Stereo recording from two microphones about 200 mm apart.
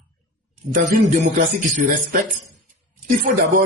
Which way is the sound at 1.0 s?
35° right (ahead or behind).